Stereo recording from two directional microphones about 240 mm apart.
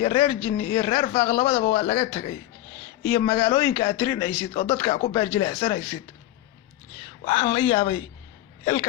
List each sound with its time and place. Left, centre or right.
0.0 s speech: left
7.3 s speech: left